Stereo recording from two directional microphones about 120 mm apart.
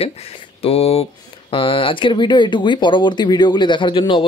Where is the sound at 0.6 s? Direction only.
55° left (ahead or behind).